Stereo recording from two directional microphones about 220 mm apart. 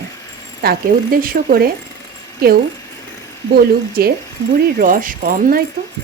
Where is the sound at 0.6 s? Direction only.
40° right (ahead or behind).